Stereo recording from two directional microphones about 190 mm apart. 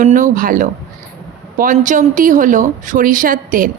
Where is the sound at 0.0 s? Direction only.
45° right (ahead or behind).